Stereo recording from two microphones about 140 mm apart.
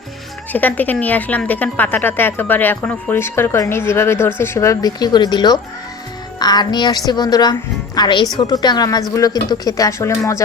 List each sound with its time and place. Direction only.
0.5 s a woman's voice: 10° left (ahead or behind)